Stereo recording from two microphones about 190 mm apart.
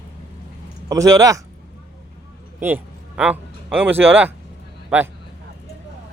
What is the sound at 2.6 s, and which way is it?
Speech, 10° right (ahead or behind).